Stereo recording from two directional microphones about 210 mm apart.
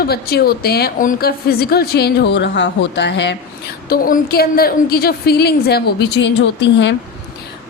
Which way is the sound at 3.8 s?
45° left (ahead or behind).